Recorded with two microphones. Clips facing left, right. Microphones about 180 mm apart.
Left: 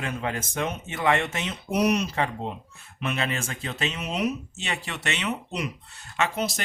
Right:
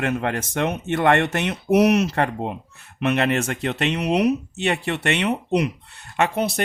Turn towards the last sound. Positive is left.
turn(degrees=-60)  # may be behind; listen again after turning